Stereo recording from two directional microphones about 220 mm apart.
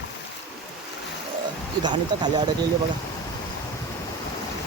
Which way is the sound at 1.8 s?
20° right (ahead or behind).